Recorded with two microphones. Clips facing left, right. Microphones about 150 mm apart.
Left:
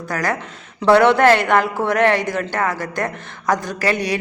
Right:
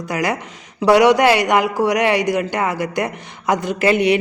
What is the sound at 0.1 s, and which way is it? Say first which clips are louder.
A man's voice: right 1 dB; 20° right (ahead or behind).